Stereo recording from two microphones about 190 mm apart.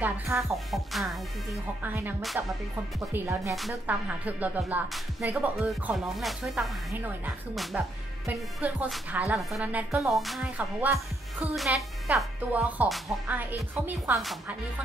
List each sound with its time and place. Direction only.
0.4 s music: centre (ahead or behind)
1.8 s speech: 10° right (ahead or behind)
3.5 s music: 5° right (ahead or behind)
7.7 s speech: 10° right (ahead or behind)
9.3 s music: 5° right (ahead or behind)
12.1 s speech: 10° right (ahead or behind)